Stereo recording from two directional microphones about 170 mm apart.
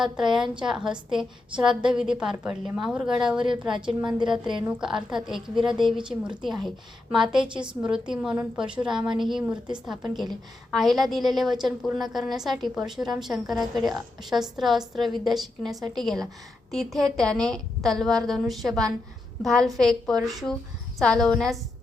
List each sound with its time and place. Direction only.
0.0 s a woman's voice: centre (ahead or behind)
3.8 s a woman's voice: 25° right (ahead or behind)
4.8 s a woman's voice: 5° right (ahead or behind)
10.7 s a woman's voice: centre (ahead or behind)